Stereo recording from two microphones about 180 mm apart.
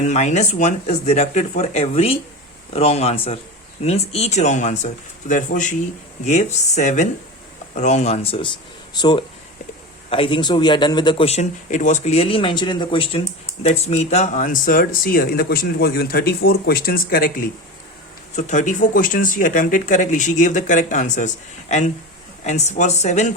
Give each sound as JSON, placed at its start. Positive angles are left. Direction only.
{"t": 0.1, "sound": "speech", "side_deg": 40}
{"t": 18.3, "sound": "speech", "side_deg": 40}